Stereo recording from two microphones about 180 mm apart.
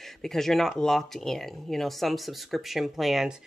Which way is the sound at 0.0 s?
Centre (ahead or behind).